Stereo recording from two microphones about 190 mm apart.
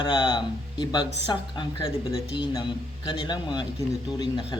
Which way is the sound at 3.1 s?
25° left (ahead or behind).